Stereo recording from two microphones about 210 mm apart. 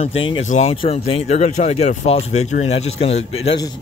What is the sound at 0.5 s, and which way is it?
Speech, 30° left (ahead or behind).